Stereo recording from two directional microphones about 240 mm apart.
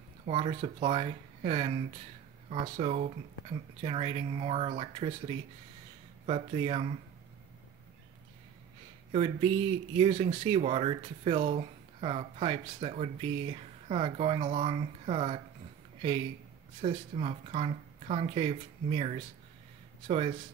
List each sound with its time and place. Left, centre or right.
0.2 s speech: right
9.1 s speech: right